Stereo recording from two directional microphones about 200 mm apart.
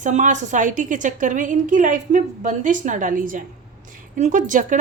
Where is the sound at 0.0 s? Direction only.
40° right (ahead or behind).